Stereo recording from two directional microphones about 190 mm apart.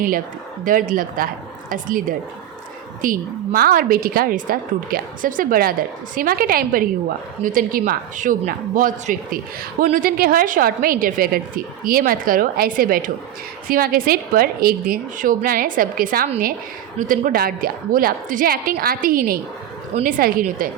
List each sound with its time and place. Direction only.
0.6 s a woman's voice: 45° right (ahead or behind)